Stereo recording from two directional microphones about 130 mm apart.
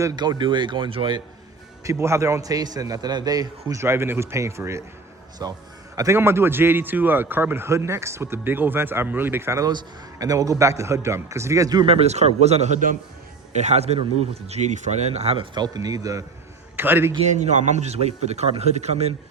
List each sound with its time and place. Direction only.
0.0 s speech: 35° right (ahead or behind)
1.8 s a man's voice: 25° right (ahead or behind)
11.9 s speech: 55° right (ahead or behind); by 13.0 s 80° right
13.6 s speech: 60° right (ahead or behind)
15.5 s a man's voice: 30° right (ahead or behind)
16.7 s a man's voice: 15° right (ahead or behind)
17.2 s speech: 65° right (ahead or behind)